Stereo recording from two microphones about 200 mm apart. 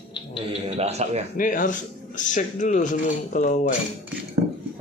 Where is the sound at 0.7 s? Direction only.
30° right (ahead or behind).